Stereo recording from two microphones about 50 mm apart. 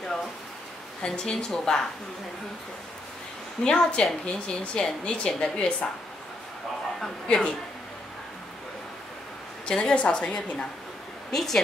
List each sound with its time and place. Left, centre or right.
1.0 s a woman's voice: centre
3.6 s a woman's voice: centre
7.2 s a woman's voice: centre
9.7 s a woman's voice: centre
11.3 s a woman's voice: centre